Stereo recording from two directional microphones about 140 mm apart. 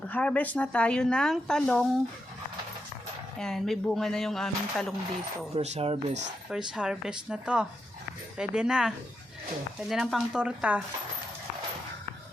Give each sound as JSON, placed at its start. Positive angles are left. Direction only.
{"t": 0.1, "sound": "speech", "side_deg": 10}
{"t": 3.3, "sound": "speech", "side_deg": 5}
{"t": 5.5, "sound": "speech", "side_deg": -50}
{"t": 6.7, "sound": "speech", "side_deg": -5}
{"t": 9.9, "sound": "speech", "side_deg": 0}